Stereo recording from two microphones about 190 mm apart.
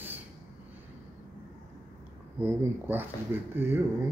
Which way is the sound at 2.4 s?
10° right (ahead or behind).